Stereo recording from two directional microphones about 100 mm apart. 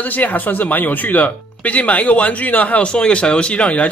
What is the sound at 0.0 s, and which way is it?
Speech, 15° left (ahead or behind).